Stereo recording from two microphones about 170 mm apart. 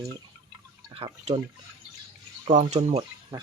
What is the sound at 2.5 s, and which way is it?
Speech, 40° right (ahead or behind).